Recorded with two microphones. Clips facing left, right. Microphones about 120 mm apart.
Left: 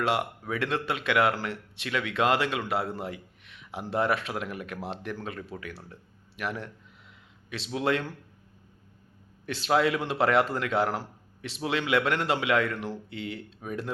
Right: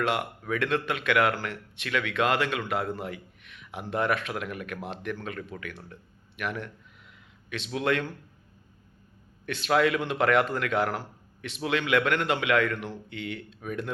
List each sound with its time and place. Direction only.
0.0 s a man's voice: 30° left (ahead or behind)
9.5 s a man's voice: 30° left (ahead or behind)